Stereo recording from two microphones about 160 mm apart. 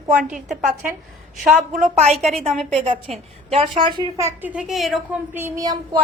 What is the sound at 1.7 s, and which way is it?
Speech, 50° right (ahead or behind).